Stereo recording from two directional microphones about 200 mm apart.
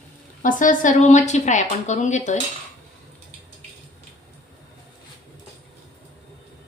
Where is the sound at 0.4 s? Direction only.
40° left (ahead or behind).